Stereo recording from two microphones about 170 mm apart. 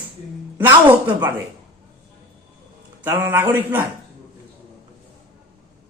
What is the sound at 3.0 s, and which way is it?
Speech, 15° right (ahead or behind).